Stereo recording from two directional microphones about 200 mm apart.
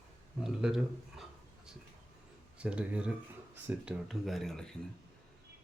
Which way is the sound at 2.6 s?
5° right (ahead or behind).